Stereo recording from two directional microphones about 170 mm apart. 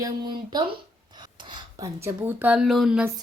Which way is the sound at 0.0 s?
25° right (ahead or behind).